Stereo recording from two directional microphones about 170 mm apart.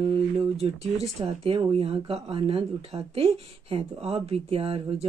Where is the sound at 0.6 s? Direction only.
35° right (ahead or behind).